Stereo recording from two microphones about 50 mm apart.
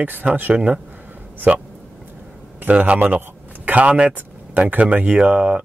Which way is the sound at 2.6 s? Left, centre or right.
Right.